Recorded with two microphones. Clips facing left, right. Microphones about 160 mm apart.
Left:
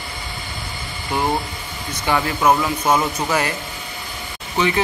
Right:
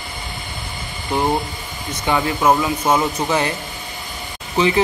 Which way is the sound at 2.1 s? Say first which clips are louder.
Right 1 dB; 15° right (ahead or behind).